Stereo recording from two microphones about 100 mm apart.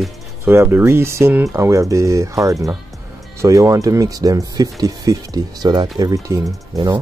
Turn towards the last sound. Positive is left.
turn(degrees=-40)  # may be behind; listen again after turning